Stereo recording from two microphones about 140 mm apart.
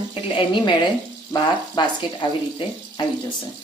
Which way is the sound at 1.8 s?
30° left (ahead or behind).